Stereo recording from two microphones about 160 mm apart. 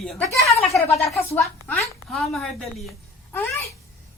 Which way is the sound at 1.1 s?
15° left (ahead or behind).